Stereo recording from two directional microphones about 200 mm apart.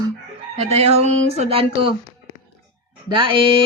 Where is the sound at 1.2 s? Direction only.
30° right (ahead or behind).